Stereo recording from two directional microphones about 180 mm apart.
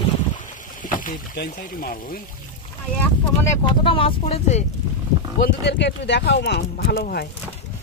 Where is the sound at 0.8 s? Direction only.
50° left (ahead or behind).